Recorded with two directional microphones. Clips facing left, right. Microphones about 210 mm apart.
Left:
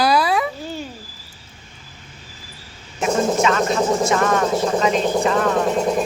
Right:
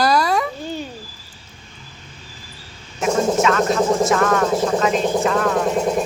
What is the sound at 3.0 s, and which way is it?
A woman's voice, centre (ahead or behind).